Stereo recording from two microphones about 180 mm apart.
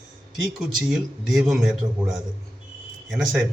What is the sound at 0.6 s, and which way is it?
A man's voice, centre (ahead or behind).